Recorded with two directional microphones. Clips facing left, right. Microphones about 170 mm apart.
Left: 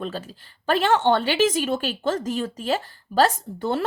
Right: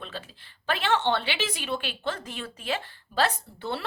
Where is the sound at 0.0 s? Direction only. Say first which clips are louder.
Left 9 dB; 45° left (ahead or behind).